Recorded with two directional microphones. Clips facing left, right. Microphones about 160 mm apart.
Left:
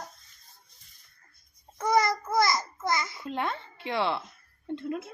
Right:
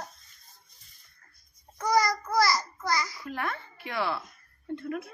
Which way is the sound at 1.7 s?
25° left (ahead or behind).